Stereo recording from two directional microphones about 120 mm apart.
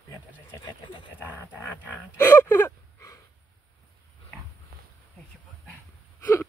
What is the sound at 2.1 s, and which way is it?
Gasp, 20° left (ahead or behind).